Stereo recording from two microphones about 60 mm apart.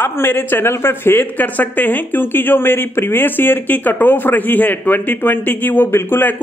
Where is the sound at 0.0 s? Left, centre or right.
Left.